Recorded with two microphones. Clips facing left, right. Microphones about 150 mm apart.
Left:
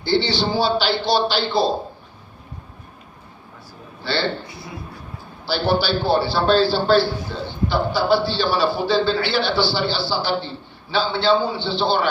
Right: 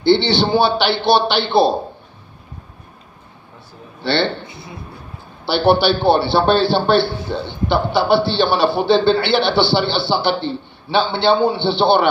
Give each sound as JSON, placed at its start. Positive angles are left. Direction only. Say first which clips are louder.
{"t": 0.0, "sound": "a man's voice", "louder": "right 6 dB", "side_deg": -65}
{"t": 4.0, "sound": "a man's voice", "louder": "right 5 dB", "side_deg": -65}
{"t": 5.5, "sound": "a man's voice", "louder": "right 6 dB", "side_deg": -65}